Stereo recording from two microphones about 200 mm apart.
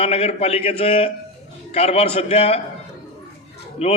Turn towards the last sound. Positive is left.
turn(degrees=35)  # may be behind; listen again after turning